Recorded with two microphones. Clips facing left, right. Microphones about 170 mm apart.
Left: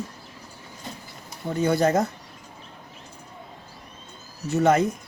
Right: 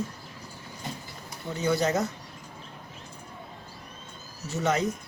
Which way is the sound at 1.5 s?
50° left (ahead or behind).